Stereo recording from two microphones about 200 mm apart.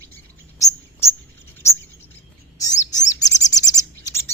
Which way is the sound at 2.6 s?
15° left (ahead or behind).